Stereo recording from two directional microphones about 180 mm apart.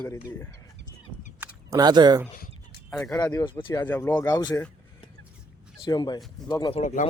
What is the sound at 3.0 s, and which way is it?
Speech, 20° left (ahead or behind).